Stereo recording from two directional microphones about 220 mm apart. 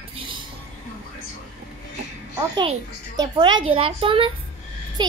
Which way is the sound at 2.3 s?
20° right (ahead or behind).